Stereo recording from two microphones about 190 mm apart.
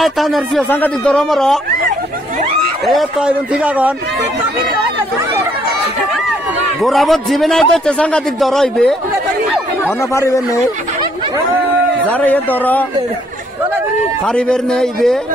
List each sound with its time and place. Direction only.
0.0 s a man's voice: centre (ahead or behind)
2.9 s a man's voice: 5° right (ahead or behind)
6.8 s a man's voice: centre (ahead or behind)
9.8 s speech: 15° left (ahead or behind)
12.1 s speech: 10° left (ahead or behind)
14.2 s a man's voice: 5° left (ahead or behind)